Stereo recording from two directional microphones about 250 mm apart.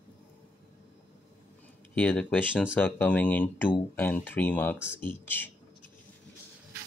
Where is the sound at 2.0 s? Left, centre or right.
Centre.